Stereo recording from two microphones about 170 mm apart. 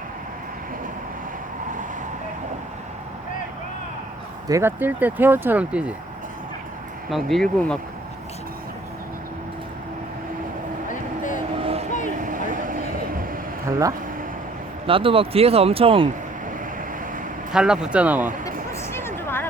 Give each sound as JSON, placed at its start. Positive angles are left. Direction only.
{"t": 4.4, "sound": "speech", "side_deg": -15}
{"t": 7.1, "sound": "speech", "side_deg": 0}
{"t": 11.6, "sound": "vehicle", "side_deg": -35}
{"t": 12.2, "sound": "vehicle", "side_deg": -50}
{"t": 13.7, "sound": "speech", "side_deg": -20}
{"t": 14.8, "sound": "speech", "side_deg": -30}
{"t": 17.5, "sound": "speech", "side_deg": -5}
{"t": 18.7, "sound": "a sound", "side_deg": 15}